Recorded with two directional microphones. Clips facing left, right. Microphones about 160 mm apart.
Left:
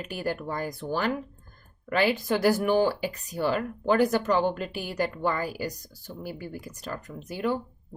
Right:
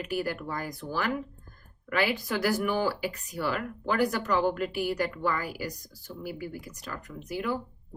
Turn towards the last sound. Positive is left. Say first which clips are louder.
# left 3 dB
turn(degrees=30)  # may be behind; listen again after turning